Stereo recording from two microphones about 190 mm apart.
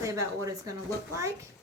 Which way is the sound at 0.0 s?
15° right (ahead or behind).